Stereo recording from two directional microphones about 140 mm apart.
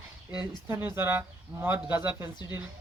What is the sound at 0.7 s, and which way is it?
Speech, 15° right (ahead or behind).